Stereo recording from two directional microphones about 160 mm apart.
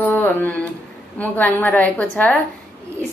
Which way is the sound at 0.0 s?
10° left (ahead or behind).